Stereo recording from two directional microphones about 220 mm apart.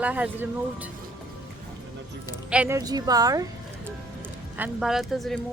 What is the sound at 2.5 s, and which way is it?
Speech, 10° right (ahead or behind).